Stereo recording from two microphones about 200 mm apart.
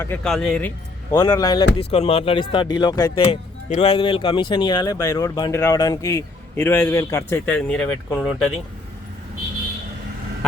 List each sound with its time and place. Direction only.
0.0 s speech: 5° left (ahead or behind)
1.1 s a man's voice: 20° left (ahead or behind); by 8.4 s centre (ahead or behind)